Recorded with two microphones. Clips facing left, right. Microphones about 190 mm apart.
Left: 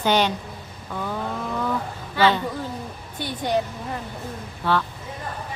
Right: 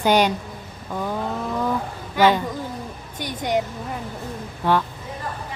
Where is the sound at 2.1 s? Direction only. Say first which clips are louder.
Right 2 dB; 15° right (ahead or behind).